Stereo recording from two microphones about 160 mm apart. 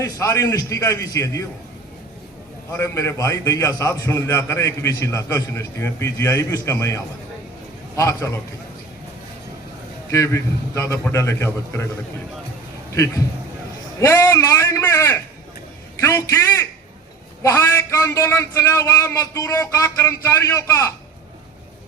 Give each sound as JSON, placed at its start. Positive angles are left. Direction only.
{"t": 0.0, "sound": "a man's voice", "side_deg": 20}
{"t": 2.7, "sound": "a man's voice", "side_deg": 15}
{"t": 10.1, "sound": "a man's voice", "side_deg": 20}
{"t": 12.9, "sound": "a man's voice", "side_deg": 20}